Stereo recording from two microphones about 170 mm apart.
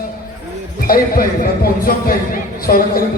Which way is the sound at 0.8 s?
60° left (ahead or behind).